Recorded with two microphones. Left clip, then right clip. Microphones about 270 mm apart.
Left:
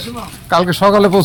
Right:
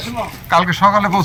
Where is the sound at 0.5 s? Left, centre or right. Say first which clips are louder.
Left 1 dB; left.